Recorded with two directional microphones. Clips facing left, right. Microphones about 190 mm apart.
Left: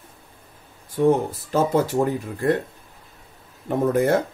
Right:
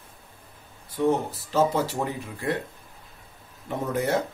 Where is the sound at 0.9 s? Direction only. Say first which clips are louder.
Left 5 dB; 50° left (ahead or behind).